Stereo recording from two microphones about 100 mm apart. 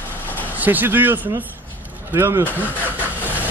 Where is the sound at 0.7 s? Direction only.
20° right (ahead or behind).